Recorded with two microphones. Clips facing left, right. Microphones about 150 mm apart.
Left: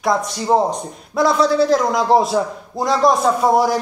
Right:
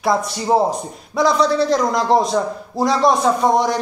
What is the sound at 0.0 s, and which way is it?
A man's voice, centre (ahead or behind).